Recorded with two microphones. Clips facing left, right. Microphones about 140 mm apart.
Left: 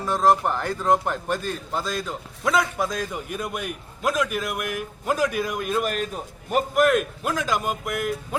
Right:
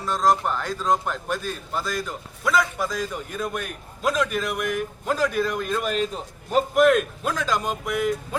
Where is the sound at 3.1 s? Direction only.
10° left (ahead or behind).